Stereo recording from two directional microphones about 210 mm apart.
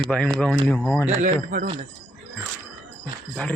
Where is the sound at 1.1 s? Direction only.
40° right (ahead or behind).